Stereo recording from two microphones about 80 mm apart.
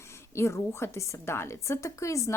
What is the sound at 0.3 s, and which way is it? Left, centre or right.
A woman's voice, left.